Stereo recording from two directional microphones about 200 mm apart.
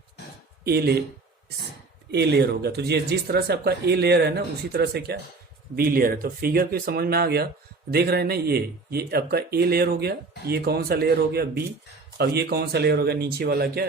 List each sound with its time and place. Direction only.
0.6 s speech: 55° right (ahead or behind)
2.0 s speech: 55° right (ahead or behind)